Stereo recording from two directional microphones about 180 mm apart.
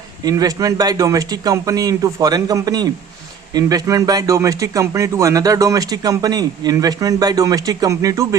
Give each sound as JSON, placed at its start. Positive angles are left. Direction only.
{"t": 0.3, "sound": "speech", "side_deg": -20}